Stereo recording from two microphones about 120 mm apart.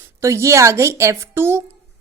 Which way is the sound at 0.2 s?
25° right (ahead or behind).